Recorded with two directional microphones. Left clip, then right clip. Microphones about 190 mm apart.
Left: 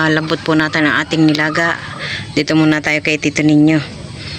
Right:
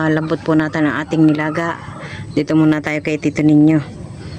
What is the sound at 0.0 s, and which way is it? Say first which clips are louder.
Speech: left 3 dB; 15° right (ahead or behind).